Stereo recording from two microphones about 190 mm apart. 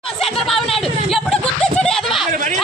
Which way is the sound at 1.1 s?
Centre (ahead or behind).